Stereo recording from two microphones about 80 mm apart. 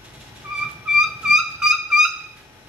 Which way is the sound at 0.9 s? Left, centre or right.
Centre.